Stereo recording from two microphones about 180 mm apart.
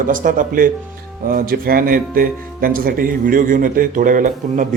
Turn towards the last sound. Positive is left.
turn(degrees=-45)  # may be behind; listen again after turning